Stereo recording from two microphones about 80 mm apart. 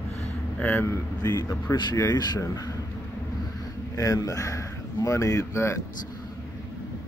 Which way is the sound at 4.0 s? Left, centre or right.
Left.